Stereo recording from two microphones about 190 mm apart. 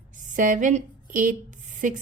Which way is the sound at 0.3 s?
45° right (ahead or behind).